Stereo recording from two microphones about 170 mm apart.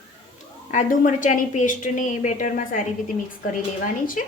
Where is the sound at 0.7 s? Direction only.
50° left (ahead or behind).